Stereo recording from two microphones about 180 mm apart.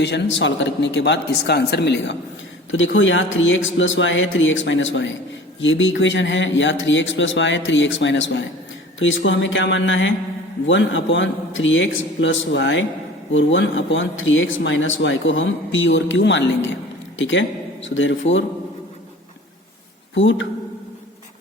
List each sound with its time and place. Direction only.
0.0 s a man's voice: 75° left (ahead or behind)
2.7 s speech: 90° left
20.1 s speech: 90° left